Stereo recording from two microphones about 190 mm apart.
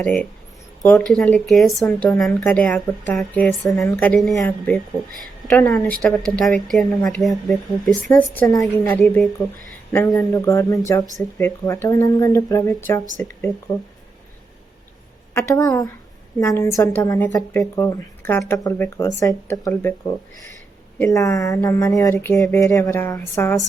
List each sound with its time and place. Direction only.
0.0 s speech: 5° left (ahead or behind)
4.2 s speech: centre (ahead or behind)
15.3 s speech: 15° left (ahead or behind)
21.0 s speech: 15° left (ahead or behind)